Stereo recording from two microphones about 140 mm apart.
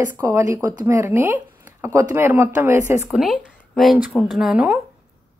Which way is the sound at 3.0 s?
5° right (ahead or behind).